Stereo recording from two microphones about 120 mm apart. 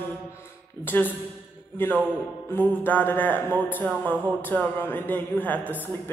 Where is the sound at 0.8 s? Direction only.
15° left (ahead or behind).